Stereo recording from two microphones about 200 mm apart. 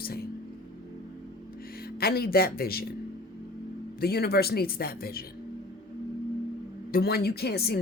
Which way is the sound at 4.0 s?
50° left (ahead or behind).